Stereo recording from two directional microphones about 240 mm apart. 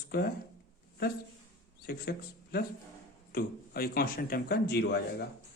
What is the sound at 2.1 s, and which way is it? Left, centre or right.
Speech, left.